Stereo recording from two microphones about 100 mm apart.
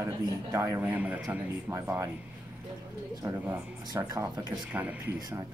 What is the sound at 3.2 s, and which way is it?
Speech, 25° right (ahead or behind).